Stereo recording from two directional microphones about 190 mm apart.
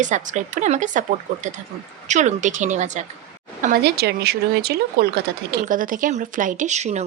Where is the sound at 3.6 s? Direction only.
55° right (ahead or behind).